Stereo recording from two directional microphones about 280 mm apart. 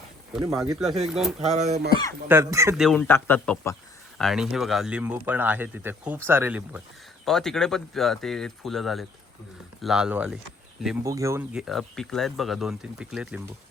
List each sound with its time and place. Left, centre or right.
0.3 s speech: centre
1.5 s speech: right
2.2 s speech: centre